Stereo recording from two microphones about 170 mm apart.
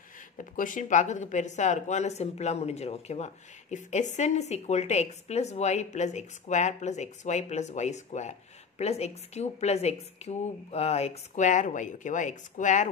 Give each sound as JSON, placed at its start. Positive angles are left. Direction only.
{"t": 0.4, "sound": "a woman's voice", "side_deg": 50}